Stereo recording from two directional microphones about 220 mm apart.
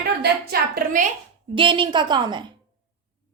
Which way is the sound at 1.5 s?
20° right (ahead or behind).